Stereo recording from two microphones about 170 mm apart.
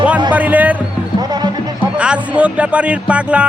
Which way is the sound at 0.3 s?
10° right (ahead or behind).